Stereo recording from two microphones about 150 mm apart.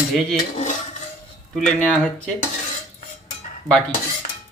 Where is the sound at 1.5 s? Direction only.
5° left (ahead or behind).